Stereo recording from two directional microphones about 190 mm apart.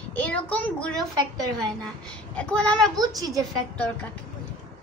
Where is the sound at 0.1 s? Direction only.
5° left (ahead or behind).